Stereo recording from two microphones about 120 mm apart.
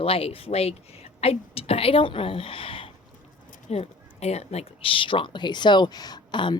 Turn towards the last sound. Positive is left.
turn(degrees=40)  # may be behind; listen again after turning